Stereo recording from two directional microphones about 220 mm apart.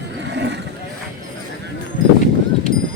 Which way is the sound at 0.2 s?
55° right (ahead or behind).